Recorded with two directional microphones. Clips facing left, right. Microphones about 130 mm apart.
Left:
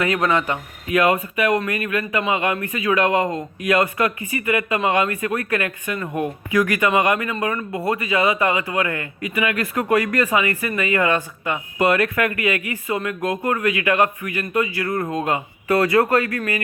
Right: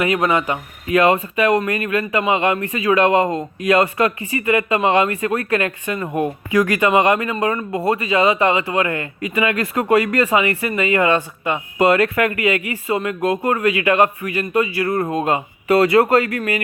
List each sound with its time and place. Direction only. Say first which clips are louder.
0.0 s a man's voice: right 2 dB; 20° right (ahead or behind)
0.9 s speech: right 3 dB; 35° right (ahead or behind)